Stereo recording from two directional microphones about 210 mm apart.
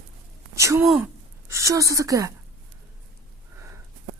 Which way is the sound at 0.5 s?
15° right (ahead or behind).